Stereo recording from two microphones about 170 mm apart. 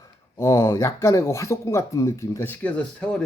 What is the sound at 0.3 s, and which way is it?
Speech, 15° left (ahead or behind).